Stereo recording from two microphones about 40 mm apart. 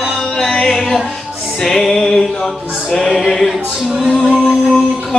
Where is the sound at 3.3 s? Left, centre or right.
Centre.